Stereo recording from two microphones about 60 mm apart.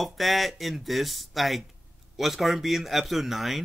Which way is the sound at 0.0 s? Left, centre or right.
Centre.